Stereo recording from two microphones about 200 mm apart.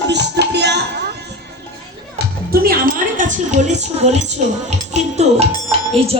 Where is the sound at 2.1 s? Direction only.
50° right (ahead or behind).